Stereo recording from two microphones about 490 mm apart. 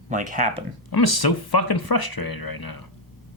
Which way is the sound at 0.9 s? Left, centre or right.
Left.